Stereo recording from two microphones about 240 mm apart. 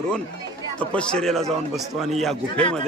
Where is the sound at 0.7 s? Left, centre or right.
Centre.